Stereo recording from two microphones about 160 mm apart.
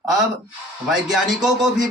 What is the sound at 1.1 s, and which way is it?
Speech, 5° right (ahead or behind).